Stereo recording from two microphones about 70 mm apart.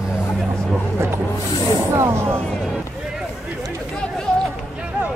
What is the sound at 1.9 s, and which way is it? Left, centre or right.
Vehicle, right.